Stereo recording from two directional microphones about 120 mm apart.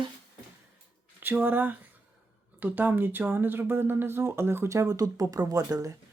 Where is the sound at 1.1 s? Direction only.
15° right (ahead or behind).